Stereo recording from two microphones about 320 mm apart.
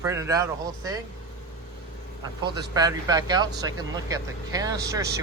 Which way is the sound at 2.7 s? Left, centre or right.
Centre.